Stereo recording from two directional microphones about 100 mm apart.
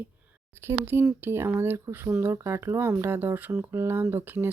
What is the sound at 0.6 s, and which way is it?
Speech, 25° right (ahead or behind).